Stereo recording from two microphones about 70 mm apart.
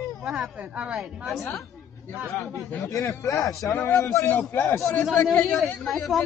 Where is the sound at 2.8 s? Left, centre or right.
Left.